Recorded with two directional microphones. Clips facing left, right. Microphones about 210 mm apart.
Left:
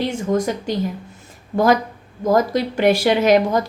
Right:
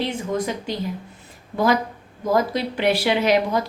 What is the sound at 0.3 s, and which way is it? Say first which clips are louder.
Speech: left 5 dB; 45° left (ahead or behind).